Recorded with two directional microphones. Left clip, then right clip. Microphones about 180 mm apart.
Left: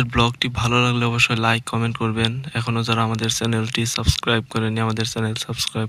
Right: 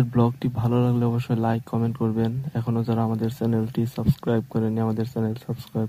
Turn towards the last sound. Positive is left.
turn(degrees=25)  # may be behind; listen again after turning